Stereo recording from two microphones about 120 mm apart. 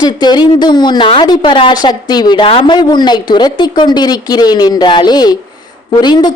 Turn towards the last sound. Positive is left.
turn(degrees=40)  # may be behind; listen again after turning